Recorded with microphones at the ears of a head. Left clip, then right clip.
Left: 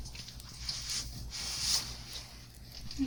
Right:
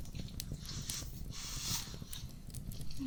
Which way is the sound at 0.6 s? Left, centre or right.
Left.